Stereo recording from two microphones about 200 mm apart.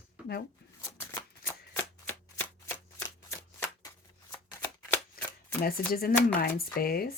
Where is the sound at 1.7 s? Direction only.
10° left (ahead or behind).